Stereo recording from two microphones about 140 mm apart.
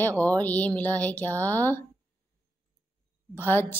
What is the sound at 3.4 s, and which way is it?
Speech, 15° left (ahead or behind).